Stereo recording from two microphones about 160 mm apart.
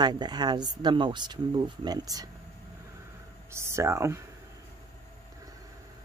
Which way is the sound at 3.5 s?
15° right (ahead or behind).